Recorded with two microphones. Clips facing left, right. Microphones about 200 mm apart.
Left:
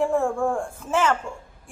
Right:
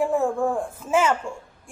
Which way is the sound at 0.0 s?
5° right (ahead or behind).